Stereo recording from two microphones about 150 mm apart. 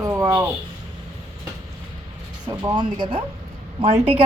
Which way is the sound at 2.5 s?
25° right (ahead or behind).